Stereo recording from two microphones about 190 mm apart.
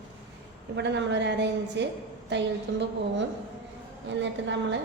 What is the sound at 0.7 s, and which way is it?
A woman's voice, 65° right (ahead or behind).